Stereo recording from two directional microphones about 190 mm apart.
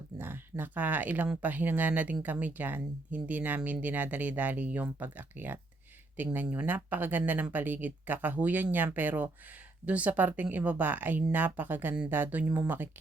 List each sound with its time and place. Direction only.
0.2 s speech: 10° right (ahead or behind)